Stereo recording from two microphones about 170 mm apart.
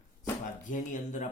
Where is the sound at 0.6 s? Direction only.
50° left (ahead or behind).